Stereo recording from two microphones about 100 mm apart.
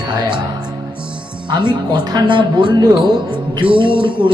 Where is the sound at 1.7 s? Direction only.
45° right (ahead or behind).